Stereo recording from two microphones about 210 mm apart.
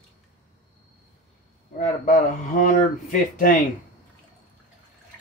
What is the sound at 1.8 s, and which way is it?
Speech, 40° left (ahead or behind).